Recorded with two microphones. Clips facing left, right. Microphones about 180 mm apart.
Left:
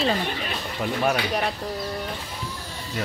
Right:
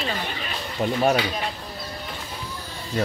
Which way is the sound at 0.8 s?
25° right (ahead or behind).